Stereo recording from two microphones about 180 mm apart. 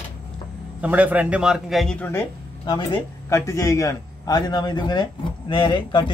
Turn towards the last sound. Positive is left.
turn(degrees=25)  # may be behind; listen again after turning